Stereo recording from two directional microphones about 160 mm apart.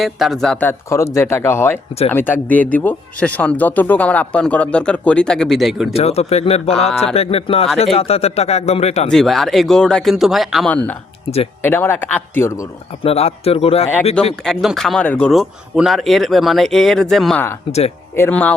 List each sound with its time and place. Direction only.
0.0 s speech: centre (ahead or behind)
5.9 s speech: 40° left (ahead or behind)
9.0 s speech: centre (ahead or behind)
11.6 s speech: 15° left (ahead or behind)
13.0 s speech: 40° left (ahead or behind)
14.4 s speech: centre (ahead or behind)
17.7 s speech: 40° left (ahead or behind)
18.1 s speech: 10° left (ahead or behind)